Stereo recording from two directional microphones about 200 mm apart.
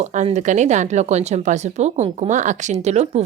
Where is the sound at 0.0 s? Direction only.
35° right (ahead or behind).